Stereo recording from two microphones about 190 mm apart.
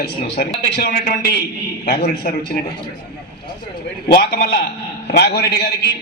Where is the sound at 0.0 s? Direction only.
55° left (ahead or behind).